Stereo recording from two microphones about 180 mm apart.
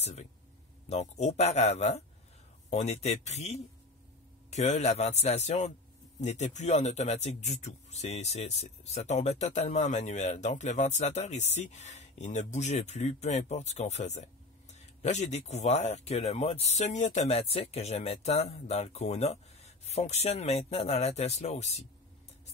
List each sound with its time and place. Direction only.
0.0 s speech: 40° left (ahead or behind)